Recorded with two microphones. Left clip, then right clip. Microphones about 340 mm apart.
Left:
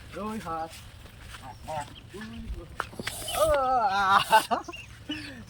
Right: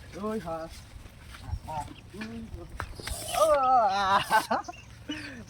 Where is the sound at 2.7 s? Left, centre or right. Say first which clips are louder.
Left 4 dB; centre.